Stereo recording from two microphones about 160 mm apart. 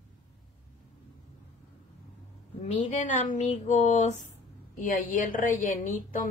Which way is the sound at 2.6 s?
45° left (ahead or behind).